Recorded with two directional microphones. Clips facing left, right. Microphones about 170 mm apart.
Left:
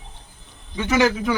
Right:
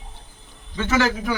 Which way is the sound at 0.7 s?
15° left (ahead or behind).